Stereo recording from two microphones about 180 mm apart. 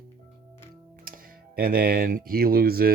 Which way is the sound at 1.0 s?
55° right (ahead or behind).